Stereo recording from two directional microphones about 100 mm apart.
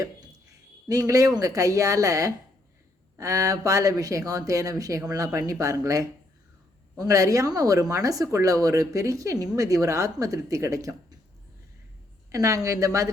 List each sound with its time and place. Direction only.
0.9 s speech: 35° right (ahead or behind)
12.3 s speech: 35° right (ahead or behind)